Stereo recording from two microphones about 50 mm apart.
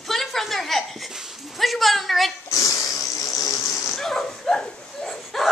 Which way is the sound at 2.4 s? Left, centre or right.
Left.